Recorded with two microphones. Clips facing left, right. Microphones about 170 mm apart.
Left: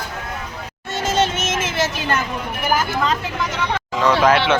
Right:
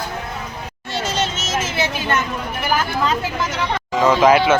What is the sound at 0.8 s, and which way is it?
Music, 50° left (ahead or behind).